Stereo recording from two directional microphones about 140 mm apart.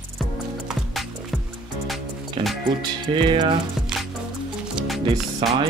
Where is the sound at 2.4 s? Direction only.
35° right (ahead or behind).